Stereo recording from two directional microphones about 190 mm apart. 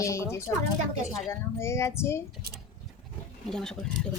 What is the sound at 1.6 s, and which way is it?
Speech, 15° left (ahead or behind).